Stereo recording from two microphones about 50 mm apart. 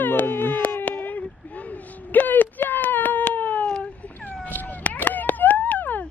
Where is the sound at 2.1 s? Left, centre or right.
Left.